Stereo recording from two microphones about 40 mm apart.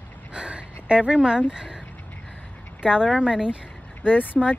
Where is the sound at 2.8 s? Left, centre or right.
Centre.